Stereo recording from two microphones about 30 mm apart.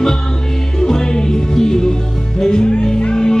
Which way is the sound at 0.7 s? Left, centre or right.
Left.